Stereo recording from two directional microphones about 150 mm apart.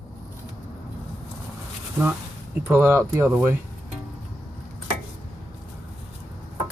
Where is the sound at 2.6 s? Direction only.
15° right (ahead or behind).